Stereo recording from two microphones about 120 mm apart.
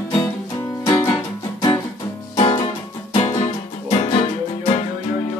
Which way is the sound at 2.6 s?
80° left.